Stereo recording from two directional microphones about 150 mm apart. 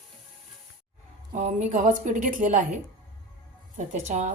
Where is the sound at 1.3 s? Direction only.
50° right (ahead or behind).